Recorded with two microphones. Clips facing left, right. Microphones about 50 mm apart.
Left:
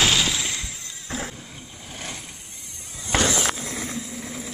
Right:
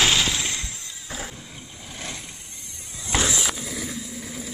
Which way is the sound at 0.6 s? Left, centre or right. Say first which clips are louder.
Even; centre.